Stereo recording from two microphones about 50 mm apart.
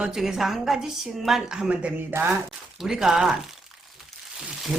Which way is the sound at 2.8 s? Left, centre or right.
Centre.